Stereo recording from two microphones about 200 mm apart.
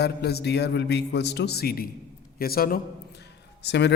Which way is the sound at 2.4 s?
50° left (ahead or behind).